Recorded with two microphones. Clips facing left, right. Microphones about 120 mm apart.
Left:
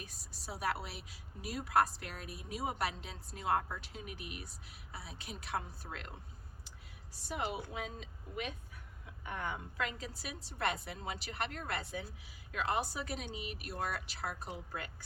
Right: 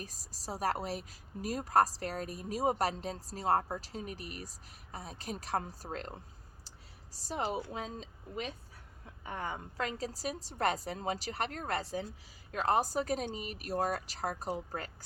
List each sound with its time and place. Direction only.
0.0 s a woman's voice: 40° right (ahead or behind)